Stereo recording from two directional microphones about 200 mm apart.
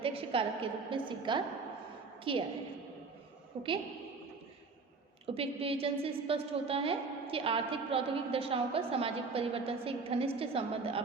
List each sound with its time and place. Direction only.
0.0 s a woman's voice: 30° right (ahead or behind)
3.6 s a woman's voice: 30° right (ahead or behind)
5.2 s a woman's voice: 30° right (ahead or behind)